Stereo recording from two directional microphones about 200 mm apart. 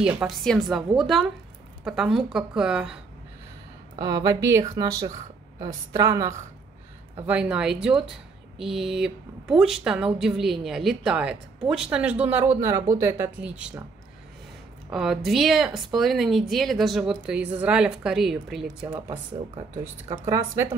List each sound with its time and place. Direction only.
0.0 s a woman's voice: 5° right (ahead or behind)
4.0 s a woman's voice: 20° right (ahead or behind)
7.2 s a woman's voice: 5° right (ahead or behind)
14.9 s a woman's voice: centre (ahead or behind)
18.9 s a woman's voice: 20° right (ahead or behind)